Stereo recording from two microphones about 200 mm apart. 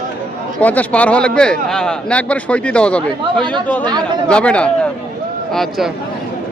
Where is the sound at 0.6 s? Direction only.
10° left (ahead or behind).